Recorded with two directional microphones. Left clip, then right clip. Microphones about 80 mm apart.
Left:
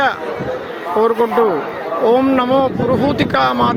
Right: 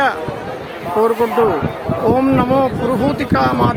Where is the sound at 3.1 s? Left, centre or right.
Left.